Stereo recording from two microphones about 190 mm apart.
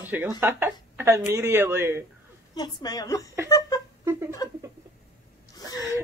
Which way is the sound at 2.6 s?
20° left (ahead or behind).